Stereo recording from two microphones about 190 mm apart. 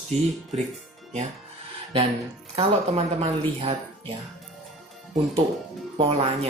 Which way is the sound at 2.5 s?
35° right (ahead or behind).